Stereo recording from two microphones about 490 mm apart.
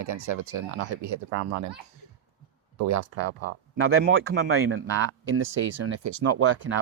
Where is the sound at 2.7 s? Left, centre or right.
Right.